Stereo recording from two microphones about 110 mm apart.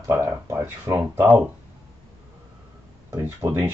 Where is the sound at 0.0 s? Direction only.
20° right (ahead or behind).